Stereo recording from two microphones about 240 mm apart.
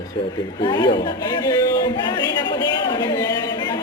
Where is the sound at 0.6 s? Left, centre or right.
Centre.